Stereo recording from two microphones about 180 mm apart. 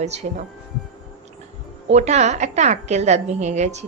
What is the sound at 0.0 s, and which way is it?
Speech, 40° right (ahead or behind).